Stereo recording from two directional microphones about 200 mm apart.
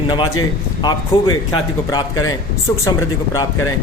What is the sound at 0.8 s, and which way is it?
Speech, 20° left (ahead or behind).